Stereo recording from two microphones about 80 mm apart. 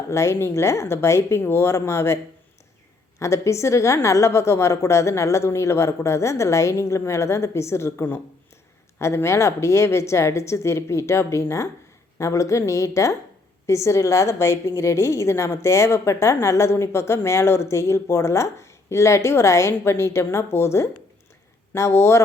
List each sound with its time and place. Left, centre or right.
0.1 s a woman's voice: left
3.2 s a woman's voice: left